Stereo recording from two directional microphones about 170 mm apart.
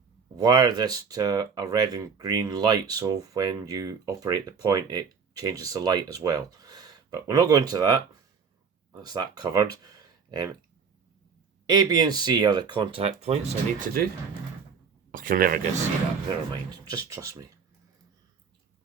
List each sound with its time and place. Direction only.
0.3 s speech: 25° right (ahead or behind)
9.8 s a sound: 25° right (ahead or behind)
11.6 s speech: 25° right (ahead or behind); by 14.1 s 55° right (ahead or behind)
15.1 s speech: 55° right (ahead or behind)
16.5 s speech: 20° right (ahead or behind)